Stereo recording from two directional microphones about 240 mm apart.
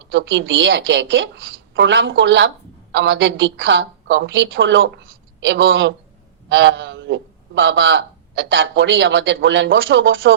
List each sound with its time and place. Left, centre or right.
0.0 s a man's voice: right